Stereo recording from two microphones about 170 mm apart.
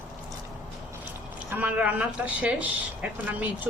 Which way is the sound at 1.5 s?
10° right (ahead or behind).